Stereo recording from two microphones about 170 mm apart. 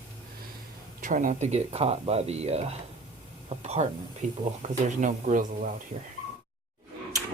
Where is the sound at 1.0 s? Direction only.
50° right (ahead or behind).